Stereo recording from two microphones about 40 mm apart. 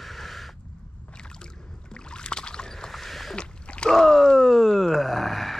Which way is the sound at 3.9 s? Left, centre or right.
Centre.